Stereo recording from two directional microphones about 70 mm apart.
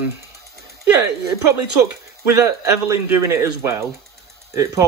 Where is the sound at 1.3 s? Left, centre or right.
Right.